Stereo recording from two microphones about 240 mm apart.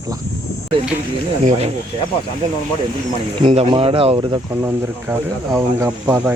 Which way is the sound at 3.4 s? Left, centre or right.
Right.